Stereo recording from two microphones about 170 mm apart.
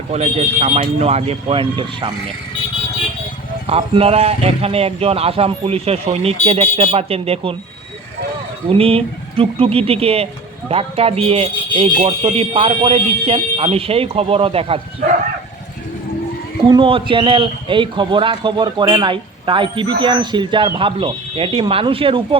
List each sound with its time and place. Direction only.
0.1 s speech: 40° right (ahead or behind)
3.7 s speech: 35° right (ahead or behind)
8.7 s speech: 35° right (ahead or behind)
16.6 s a man's voice: 30° right (ahead or behind)